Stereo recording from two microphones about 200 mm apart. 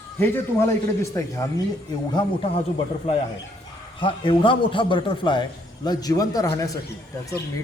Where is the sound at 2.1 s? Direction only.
30° left (ahead or behind).